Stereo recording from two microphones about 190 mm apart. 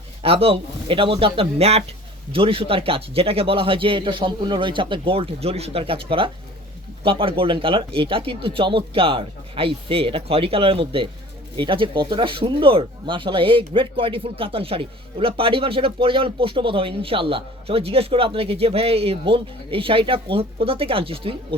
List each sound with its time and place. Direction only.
0.2 s speech: 30° right (ahead or behind)